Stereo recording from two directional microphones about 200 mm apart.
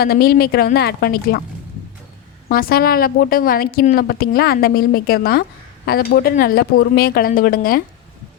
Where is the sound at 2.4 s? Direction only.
50° left (ahead or behind).